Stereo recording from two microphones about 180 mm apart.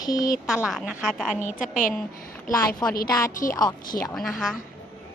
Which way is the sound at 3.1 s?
20° left (ahead or behind).